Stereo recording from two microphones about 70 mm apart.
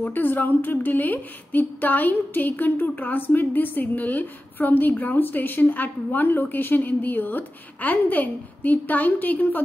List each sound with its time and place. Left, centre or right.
0.0 s speech: left